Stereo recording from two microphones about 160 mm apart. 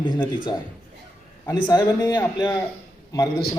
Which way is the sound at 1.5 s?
25° left (ahead or behind).